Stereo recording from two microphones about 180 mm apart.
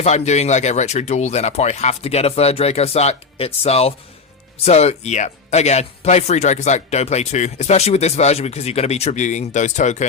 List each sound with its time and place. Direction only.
0.0 s speech: 40° left (ahead or behind)